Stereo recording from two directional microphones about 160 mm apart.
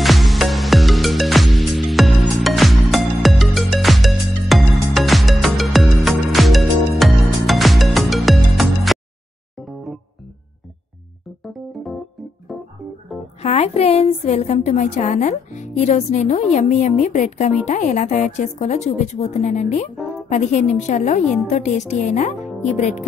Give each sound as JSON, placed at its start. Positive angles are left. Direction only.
{"t": 0.0, "sound": "music", "side_deg": 0}
{"t": 11.4, "sound": "keyboard", "side_deg": 0}
{"t": 12.5, "sound": "organ", "side_deg": 0}
{"t": 13.4, "sound": "a woman's voice", "side_deg": 40}